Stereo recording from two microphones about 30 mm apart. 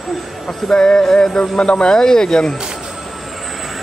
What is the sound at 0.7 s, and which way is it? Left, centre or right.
Speech, left.